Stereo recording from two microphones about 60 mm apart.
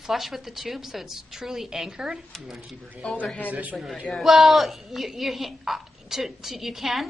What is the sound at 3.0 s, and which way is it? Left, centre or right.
Speech, centre.